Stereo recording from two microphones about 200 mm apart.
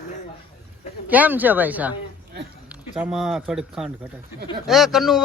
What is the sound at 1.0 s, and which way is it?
Speech, 10° right (ahead or behind).